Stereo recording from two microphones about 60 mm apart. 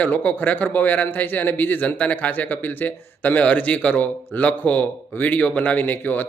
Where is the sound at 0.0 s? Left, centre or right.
Left.